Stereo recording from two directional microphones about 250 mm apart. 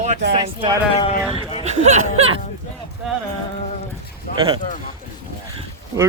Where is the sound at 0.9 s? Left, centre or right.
Left.